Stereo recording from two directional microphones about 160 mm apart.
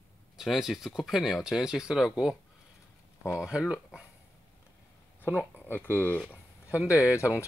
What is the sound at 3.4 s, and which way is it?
Speech, 5° right (ahead or behind).